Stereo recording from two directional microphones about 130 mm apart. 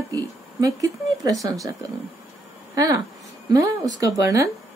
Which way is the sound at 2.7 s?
25° right (ahead or behind).